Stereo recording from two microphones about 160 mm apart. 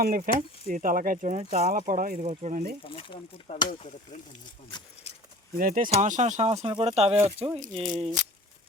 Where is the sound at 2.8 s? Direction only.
30° left (ahead or behind).